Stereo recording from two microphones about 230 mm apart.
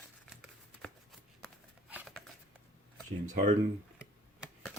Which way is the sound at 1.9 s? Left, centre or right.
Centre.